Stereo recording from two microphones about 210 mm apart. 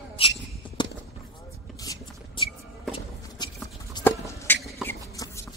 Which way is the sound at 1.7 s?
15° left (ahead or behind).